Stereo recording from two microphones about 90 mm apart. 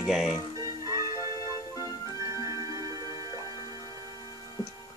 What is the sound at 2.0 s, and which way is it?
Music, 40° right (ahead or behind).